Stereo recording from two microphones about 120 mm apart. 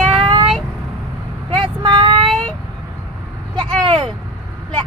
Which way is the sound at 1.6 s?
45° right (ahead or behind).